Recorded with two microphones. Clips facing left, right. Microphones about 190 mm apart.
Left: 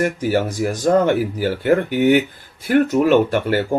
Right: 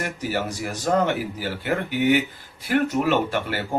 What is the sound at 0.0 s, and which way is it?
Speech, 50° left (ahead or behind).